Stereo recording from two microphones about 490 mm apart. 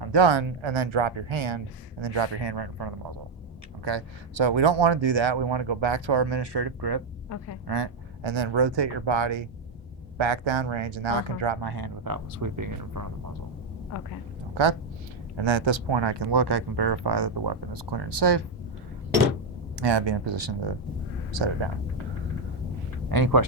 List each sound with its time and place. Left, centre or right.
0.0 s speech: right
3.8 s speech: right
7.7 s speech: right
14.5 s speech: right
19.7 s speech: right
23.0 s speech: right